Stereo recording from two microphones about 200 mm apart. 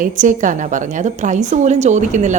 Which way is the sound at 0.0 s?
40° right (ahead or behind).